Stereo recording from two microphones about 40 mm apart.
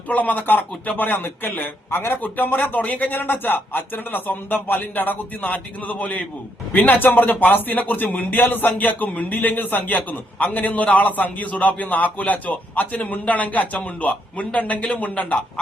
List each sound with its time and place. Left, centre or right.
0.1 s speech: left
6.7 s a man's voice: left